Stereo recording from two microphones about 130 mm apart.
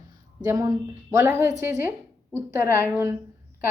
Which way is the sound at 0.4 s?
25° right (ahead or behind).